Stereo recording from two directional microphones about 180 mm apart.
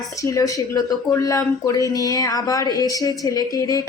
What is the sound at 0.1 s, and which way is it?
Speech, 15° left (ahead or behind).